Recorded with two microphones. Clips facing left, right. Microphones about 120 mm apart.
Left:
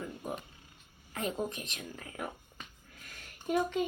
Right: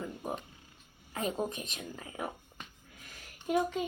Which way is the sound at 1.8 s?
30° right (ahead or behind).